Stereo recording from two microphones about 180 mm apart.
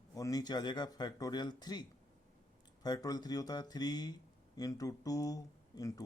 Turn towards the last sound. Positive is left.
turn(degrees=20)  # may be behind; listen again after turning